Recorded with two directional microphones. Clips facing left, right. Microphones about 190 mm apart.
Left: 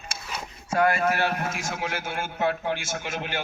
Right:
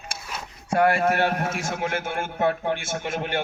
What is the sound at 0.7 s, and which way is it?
A man's voice, 60° right (ahead or behind).